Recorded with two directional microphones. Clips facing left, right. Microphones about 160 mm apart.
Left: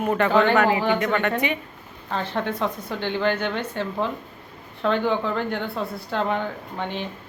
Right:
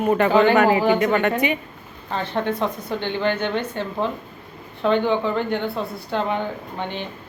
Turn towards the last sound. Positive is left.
turn(degrees=0)  # may be behind; listen again after turning